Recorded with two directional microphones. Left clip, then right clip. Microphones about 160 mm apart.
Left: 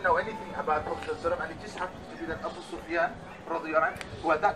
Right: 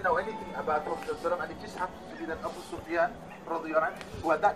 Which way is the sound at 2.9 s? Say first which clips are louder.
Even; 50° right (ahead or behind).